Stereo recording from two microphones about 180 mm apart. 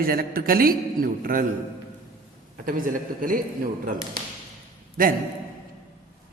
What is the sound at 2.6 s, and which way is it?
Speech, 50° right (ahead or behind).